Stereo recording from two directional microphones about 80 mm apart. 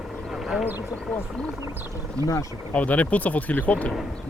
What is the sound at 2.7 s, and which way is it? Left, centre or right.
Speech, centre.